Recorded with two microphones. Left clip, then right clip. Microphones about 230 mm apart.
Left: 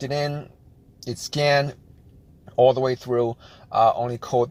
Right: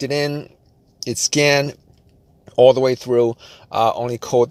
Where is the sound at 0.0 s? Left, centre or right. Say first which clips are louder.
Right 5 dB; right.